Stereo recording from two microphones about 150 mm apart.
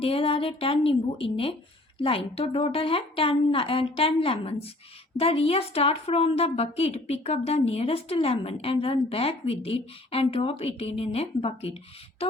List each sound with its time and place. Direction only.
0.0 s a woman's voice: 40° left (ahead or behind)